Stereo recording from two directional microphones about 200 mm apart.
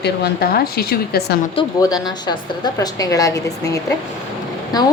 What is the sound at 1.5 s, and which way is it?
A woman's voice, 20° left (ahead or behind).